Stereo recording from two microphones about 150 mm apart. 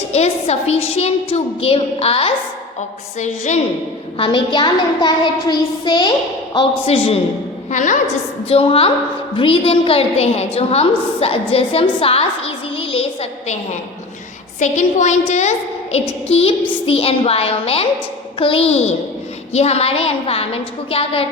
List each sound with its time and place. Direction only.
0.1 s a woman's voice: 45° left (ahead or behind)
3.2 s a woman's voice: 50° left (ahead or behind)
4.2 s a woman's voice: 35° left (ahead or behind)
6.8 s a woman's voice: 40° left (ahead or behind)
7.7 s a woman's voice: 55° left (ahead or behind)
8.4 s a woman's voice: 40° left (ahead or behind)
14.6 s a woman's voice: 50° left (ahead or behind)